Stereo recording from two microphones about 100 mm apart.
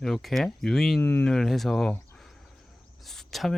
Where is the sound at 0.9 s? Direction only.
20° left (ahead or behind).